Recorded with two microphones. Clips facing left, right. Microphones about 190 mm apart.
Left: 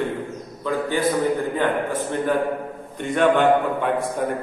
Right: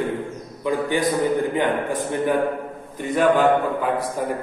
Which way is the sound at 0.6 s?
15° right (ahead or behind).